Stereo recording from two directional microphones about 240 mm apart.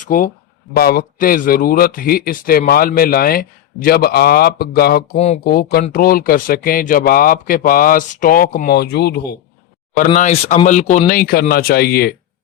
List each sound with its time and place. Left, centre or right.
0.0 s speech: left
5.1 s speech: left
10.2 s speech: left